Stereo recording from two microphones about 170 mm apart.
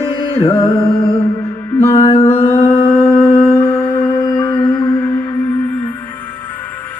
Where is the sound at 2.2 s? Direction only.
35° left (ahead or behind).